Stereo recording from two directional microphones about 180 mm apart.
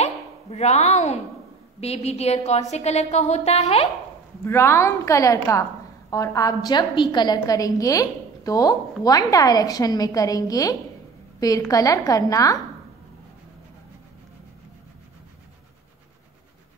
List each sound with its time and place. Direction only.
0.0 s a sound: 35° left (ahead or behind)
1.8 s a woman's voice: 35° left (ahead or behind)
4.5 s a woman's voice: 15° left (ahead or behind)